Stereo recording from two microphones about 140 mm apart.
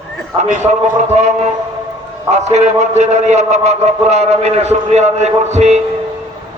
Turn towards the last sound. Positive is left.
turn(degrees=-55)  # may be behind; listen again after turning